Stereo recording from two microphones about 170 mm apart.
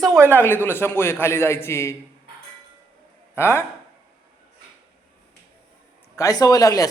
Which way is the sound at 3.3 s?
15° left (ahead or behind).